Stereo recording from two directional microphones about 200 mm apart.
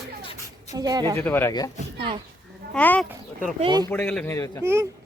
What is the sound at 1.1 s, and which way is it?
Speech, 10° left (ahead or behind).